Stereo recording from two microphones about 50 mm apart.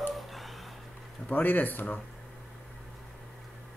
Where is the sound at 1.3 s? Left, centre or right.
Left.